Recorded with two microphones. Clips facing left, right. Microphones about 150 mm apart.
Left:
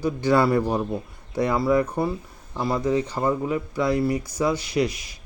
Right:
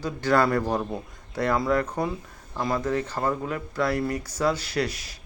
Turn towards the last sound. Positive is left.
turn(degrees=15)  # may be behind; listen again after turning